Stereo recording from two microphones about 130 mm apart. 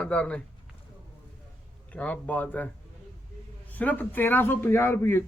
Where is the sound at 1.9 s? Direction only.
10° left (ahead or behind).